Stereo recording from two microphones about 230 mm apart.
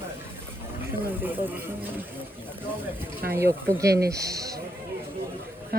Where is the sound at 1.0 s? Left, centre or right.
Centre.